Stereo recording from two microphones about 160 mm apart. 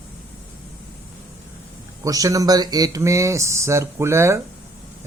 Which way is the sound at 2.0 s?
20° right (ahead or behind).